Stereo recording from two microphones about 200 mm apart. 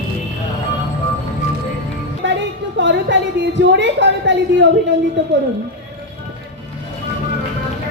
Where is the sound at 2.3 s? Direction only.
65° right (ahead or behind).